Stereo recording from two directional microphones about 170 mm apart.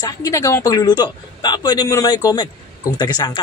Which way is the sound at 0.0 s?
20° left (ahead or behind).